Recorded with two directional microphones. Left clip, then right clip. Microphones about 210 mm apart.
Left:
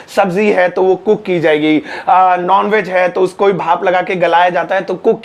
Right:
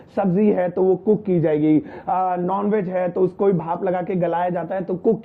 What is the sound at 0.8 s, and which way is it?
Speech, 35° left (ahead or behind).